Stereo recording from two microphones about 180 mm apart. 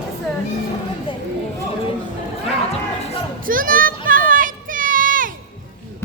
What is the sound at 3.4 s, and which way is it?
Children playing, 50° right (ahead or behind).